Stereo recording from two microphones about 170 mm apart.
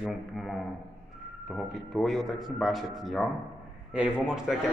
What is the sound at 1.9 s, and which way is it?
A man's voice, centre (ahead or behind).